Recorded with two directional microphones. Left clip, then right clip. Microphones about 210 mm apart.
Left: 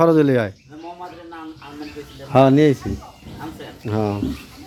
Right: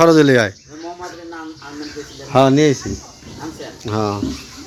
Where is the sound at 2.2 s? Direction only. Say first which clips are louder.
Right 1 dB; 20° left (ahead or behind).